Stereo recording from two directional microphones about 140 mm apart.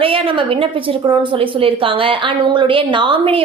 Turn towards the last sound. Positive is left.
turn(degrees=-35)  # may be behind; listen again after turning